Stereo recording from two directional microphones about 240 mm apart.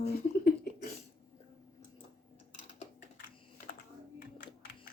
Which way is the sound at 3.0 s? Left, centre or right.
Left.